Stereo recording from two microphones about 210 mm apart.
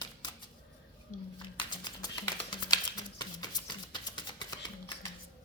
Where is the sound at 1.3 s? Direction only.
20° left (ahead or behind).